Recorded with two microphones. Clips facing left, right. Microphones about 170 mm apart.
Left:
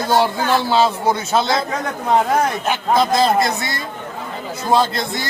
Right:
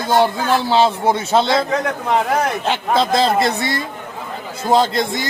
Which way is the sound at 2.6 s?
25° right (ahead or behind).